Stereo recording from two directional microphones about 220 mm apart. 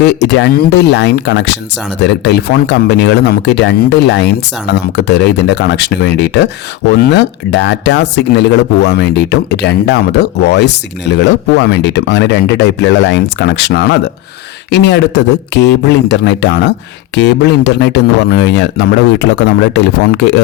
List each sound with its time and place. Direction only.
0.0 s speech: 50° left (ahead or behind)